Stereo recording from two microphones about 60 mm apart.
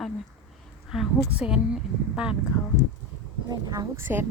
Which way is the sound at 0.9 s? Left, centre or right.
Centre.